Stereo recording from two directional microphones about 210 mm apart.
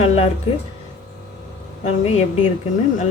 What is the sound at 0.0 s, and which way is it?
Music, 30° left (ahead or behind).